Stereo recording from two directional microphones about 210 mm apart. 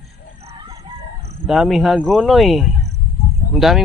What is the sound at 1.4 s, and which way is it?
Speech, centre (ahead or behind).